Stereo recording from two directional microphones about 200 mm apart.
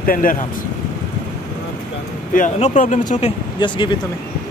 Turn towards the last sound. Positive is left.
turn(degrees=25)  # may be behind; listen again after turning